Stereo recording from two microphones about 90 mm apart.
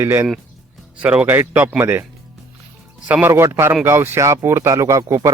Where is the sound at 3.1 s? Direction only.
15° right (ahead or behind).